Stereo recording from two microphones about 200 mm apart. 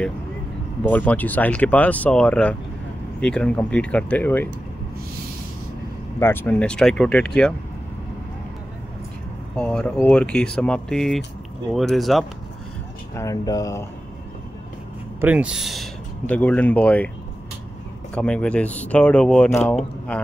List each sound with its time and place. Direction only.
0.8 s speech: 10° left (ahead or behind)
6.1 s speech: 10° left (ahead or behind)
9.6 s speech: 5° left (ahead or behind)
13.1 s speech: 15° left (ahead or behind)
15.1 s speech: 5° right (ahead or behind)
18.1 s speech: 5° left (ahead or behind)